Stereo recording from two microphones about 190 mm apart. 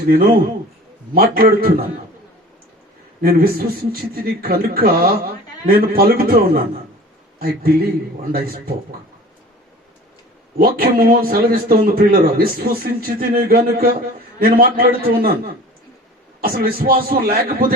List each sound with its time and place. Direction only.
0.1 s a man's voice: 50° right (ahead or behind)
3.2 s a man's voice: 50° right (ahead or behind)
10.6 s a man's voice: 50° right (ahead or behind)
16.4 s a man's voice: 50° right (ahead or behind)